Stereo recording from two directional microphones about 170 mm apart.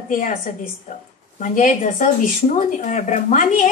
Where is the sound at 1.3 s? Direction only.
45° left (ahead or behind).